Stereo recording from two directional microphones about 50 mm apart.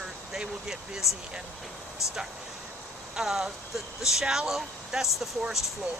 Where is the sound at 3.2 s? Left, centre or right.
Centre.